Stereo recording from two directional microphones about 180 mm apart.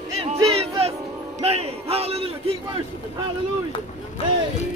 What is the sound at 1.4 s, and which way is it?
Battle cry, 35° right (ahead or behind).